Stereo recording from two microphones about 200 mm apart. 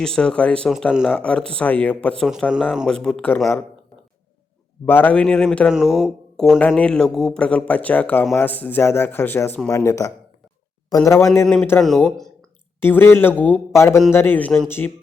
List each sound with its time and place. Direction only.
0.0 s speech: 5° left (ahead or behind)
4.9 s a man's voice: 10° left (ahead or behind)
11.3 s speech: 5° left (ahead or behind)